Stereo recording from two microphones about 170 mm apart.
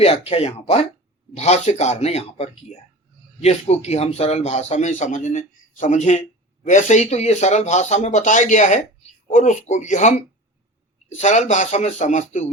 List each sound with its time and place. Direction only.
0.0 s a man's voice: 35° left (ahead or behind)